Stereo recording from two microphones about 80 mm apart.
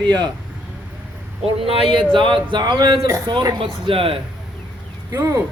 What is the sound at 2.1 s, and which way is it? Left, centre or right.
Speech, right.